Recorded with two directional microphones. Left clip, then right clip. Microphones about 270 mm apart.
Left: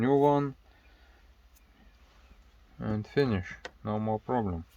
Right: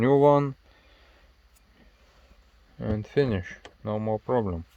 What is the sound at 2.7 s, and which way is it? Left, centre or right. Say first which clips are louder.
Speech: right 4 dB; right.